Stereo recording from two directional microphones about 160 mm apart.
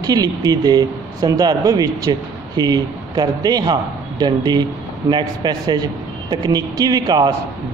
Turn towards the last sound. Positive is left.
turn(degrees=-25)  # may be behind; listen again after turning